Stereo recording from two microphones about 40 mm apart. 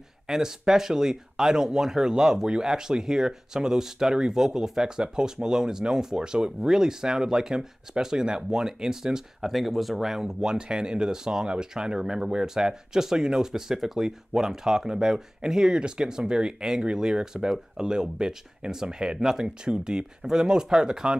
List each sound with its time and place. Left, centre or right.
0.3 s speech: centre
9.5 s speech: centre